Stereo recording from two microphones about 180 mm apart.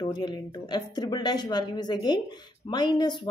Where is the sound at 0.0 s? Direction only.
25° left (ahead or behind).